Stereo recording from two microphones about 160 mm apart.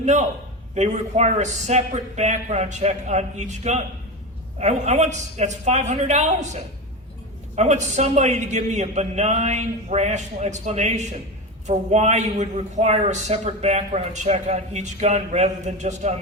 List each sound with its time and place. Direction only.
0.0 s a man's voice: 50° right (ahead or behind)